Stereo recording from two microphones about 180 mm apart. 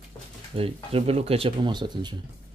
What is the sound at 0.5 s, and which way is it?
Speech, 30° right (ahead or behind).